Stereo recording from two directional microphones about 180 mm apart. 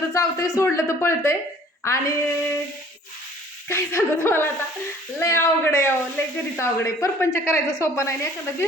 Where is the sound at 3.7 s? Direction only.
15° left (ahead or behind).